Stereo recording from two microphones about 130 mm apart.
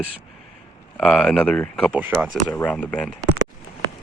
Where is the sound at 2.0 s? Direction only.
10° right (ahead or behind).